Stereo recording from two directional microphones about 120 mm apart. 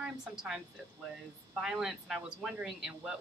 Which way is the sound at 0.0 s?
5° right (ahead or behind).